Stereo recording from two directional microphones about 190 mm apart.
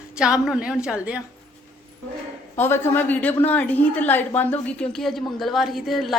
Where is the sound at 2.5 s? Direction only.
10° left (ahead or behind).